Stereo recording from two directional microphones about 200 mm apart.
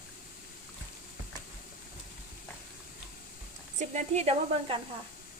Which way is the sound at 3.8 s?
35° right (ahead or behind).